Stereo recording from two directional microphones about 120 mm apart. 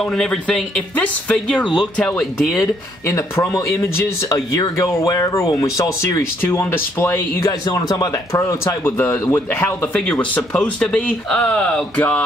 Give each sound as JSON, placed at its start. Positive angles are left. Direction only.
{"t": 0.0, "sound": "speech", "side_deg": 5}
{"t": 3.1, "sound": "speech", "side_deg": 25}
{"t": 7.6, "sound": "speech", "side_deg": 30}